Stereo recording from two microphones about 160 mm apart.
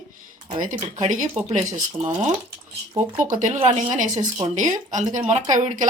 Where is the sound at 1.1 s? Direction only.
55° right (ahead or behind).